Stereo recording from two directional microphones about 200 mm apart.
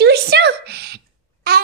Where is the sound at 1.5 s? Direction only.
50° right (ahead or behind).